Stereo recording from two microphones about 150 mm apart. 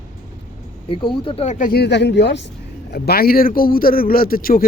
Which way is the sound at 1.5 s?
65° left (ahead or behind).